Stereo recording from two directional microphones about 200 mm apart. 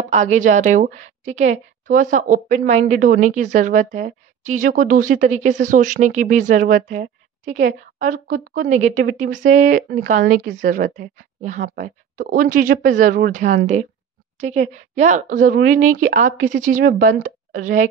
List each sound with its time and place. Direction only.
0.1 s a woman's voice: 35° right (ahead or behind)